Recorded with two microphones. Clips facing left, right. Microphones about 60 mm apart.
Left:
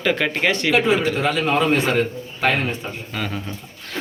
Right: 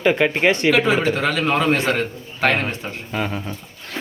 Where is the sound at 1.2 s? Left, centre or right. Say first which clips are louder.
Even; right.